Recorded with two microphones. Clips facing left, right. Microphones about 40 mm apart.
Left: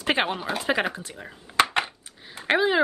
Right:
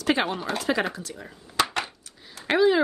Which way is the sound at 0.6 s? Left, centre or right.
Left.